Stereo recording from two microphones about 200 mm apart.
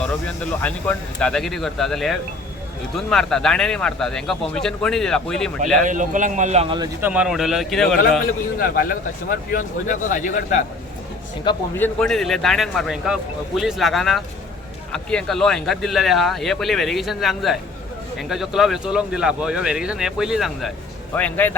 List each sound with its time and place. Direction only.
0.6 s speech: 5° left (ahead or behind)
5.8 s a man's voice: 40° right (ahead or behind); by 6.9 s 25° right (ahead or behind)
7.0 s speech: 5° right (ahead or behind)
8.5 s speech: 45° left (ahead or behind)
11.5 s speech: 20° left (ahead or behind)
11.8 s speech: 5° left (ahead or behind)